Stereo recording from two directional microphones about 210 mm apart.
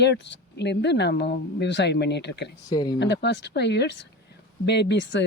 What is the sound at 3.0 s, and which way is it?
Speech, 55° left (ahead or behind).